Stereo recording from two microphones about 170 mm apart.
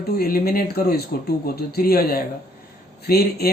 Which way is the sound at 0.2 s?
65° left (ahead or behind).